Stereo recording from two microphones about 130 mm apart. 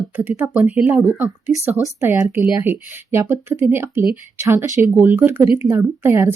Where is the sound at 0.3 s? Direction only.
15° right (ahead or behind).